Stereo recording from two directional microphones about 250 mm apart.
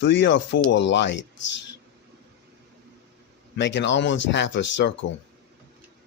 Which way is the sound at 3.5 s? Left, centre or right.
Left.